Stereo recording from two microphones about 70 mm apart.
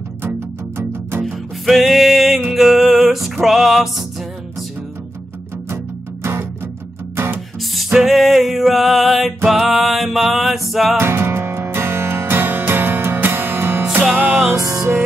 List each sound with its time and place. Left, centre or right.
0.2 s music: right
1.2 s music: centre
8.0 s music: centre
11.0 s music: right
14.1 s music: right
14.4 s music: centre